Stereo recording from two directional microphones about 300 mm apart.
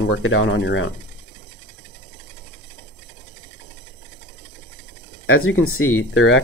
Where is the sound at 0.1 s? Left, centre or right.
Left.